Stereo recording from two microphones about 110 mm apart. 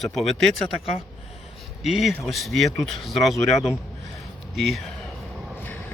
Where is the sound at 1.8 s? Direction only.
Centre (ahead or behind).